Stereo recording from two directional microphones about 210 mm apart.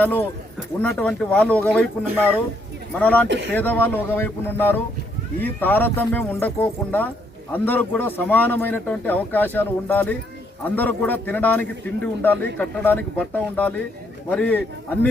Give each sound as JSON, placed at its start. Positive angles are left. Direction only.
{"t": 0.0, "sound": "speech", "side_deg": 10}
{"t": 3.0, "sound": "speech", "side_deg": 5}
{"t": 3.2, "sound": "speech", "side_deg": -55}
{"t": 3.5, "sound": "speech", "side_deg": 10}